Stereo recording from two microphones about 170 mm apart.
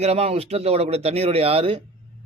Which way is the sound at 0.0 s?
35° right (ahead or behind).